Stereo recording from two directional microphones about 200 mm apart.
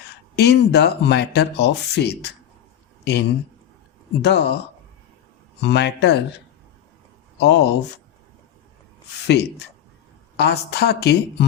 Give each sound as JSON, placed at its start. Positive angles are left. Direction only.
{"t": 0.3, "sound": "speech", "side_deg": 55}
{"t": 5.5, "sound": "speech", "side_deg": 60}
{"t": 7.3, "sound": "speech", "side_deg": 60}
{"t": 9.2, "sound": "speech", "side_deg": 60}